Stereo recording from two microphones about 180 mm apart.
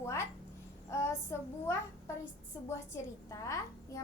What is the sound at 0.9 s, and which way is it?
Child singing, 15° left (ahead or behind).